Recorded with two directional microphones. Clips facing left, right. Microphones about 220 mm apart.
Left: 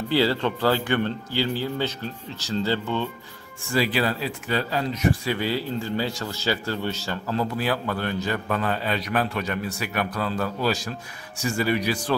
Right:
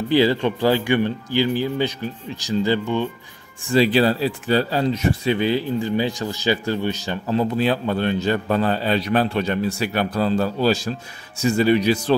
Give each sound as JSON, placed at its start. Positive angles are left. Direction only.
{"t": 0.1, "sound": "speech", "side_deg": -15}
{"t": 3.7, "sound": "speech", "side_deg": -30}